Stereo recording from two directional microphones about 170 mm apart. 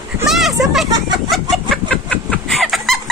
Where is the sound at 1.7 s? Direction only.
5° left (ahead or behind).